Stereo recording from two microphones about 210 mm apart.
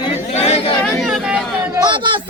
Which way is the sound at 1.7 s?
20° right (ahead or behind).